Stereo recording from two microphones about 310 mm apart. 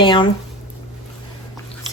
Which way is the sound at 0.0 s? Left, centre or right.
Centre.